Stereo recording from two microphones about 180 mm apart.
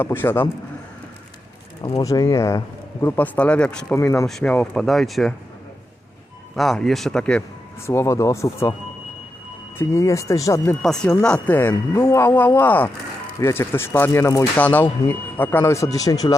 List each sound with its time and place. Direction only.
0.0 s speech: 10° left (ahead or behind)
2.0 s speech: 20° left (ahead or behind)
3.9 s speech: 15° left (ahead or behind)
4.3 s speech: 5° left (ahead or behind)
6.6 s speech: centre (ahead or behind)
7.9 s speech: 15° left (ahead or behind)
9.7 s speech: 15° left (ahead or behind)
10.8 s speech: 5° left (ahead or behind); by 16.4 s 20° left (ahead or behind)